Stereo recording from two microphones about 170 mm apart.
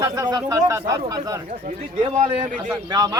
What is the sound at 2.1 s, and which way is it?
Speech, 50° right (ahead or behind).